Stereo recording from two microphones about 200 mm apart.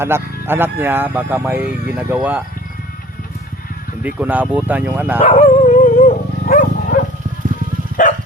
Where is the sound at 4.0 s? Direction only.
10° right (ahead or behind).